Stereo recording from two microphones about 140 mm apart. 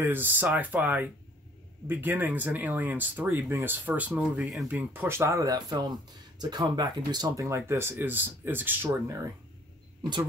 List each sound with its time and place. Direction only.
0.0 s speech: 15° right (ahead or behind)
4.7 s speech: 15° right (ahead or behind)